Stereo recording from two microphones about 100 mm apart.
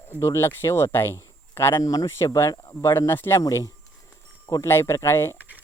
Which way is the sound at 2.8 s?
25° left (ahead or behind).